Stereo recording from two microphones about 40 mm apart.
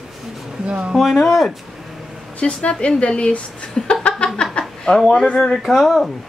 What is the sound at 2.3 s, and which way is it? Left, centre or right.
A woman's voice, left.